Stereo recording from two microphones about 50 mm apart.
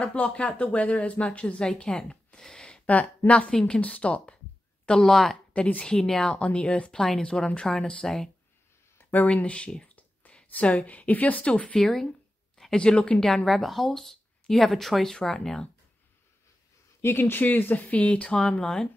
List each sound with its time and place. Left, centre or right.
0.0 s a woman's voice: left
4.8 s speech: centre
5.5 s a woman's voice: left
5.9 s speech: centre
6.9 s speech: centre
7.2 s speech: left
9.1 s speech: left
11.8 s speech: centre
12.7 s speech: centre
13.2 s speech: centre
17.0 s speech: left
18.0 s speech: left